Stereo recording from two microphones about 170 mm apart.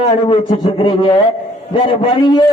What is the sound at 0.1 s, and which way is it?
A man's voice, 35° left (ahead or behind).